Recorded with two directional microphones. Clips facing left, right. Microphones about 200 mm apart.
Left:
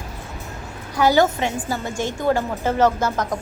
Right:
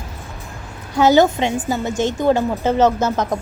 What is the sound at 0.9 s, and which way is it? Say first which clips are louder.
A woman's voice: right 4 dB; 20° right (ahead or behind).